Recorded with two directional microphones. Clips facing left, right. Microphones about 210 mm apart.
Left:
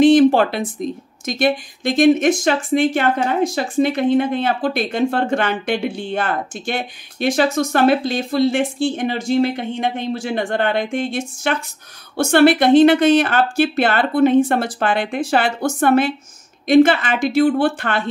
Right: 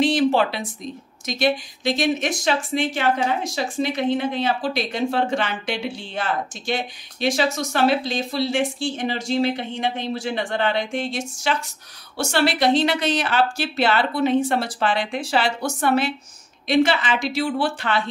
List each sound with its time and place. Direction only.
0.0 s speech: 50° left (ahead or behind)